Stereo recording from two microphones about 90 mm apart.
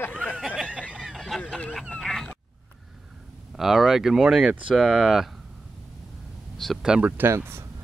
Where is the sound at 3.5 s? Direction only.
5° right (ahead or behind).